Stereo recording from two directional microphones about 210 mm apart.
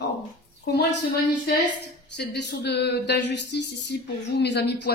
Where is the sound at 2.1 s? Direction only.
55° left (ahead or behind).